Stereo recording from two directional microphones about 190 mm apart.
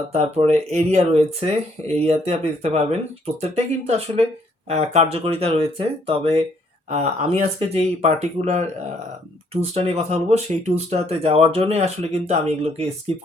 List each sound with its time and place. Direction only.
0.1 s speech: 35° right (ahead or behind)